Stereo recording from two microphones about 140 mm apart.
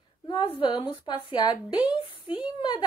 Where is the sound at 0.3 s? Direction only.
35° left (ahead or behind).